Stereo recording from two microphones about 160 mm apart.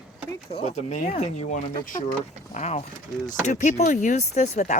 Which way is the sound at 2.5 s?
45° left (ahead or behind).